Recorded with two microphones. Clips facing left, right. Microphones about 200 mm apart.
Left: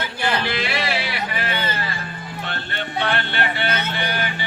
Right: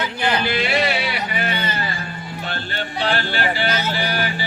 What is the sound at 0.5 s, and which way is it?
Music, 25° right (ahead or behind).